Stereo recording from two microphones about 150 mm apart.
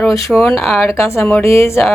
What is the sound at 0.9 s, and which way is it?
Speech, 20° left (ahead or behind).